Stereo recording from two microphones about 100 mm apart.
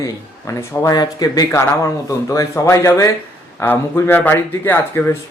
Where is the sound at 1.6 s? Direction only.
30° left (ahead or behind).